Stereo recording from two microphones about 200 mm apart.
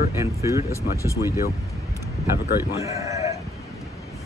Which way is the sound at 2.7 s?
15° right (ahead or behind).